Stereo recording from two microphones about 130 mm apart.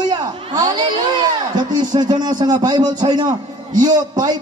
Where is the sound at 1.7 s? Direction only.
30° right (ahead or behind).